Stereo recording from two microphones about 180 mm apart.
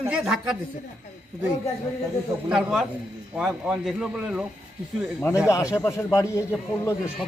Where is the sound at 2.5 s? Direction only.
5° right (ahead or behind).